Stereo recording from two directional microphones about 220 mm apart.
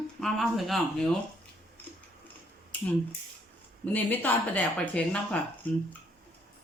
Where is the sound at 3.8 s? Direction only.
10° left (ahead or behind).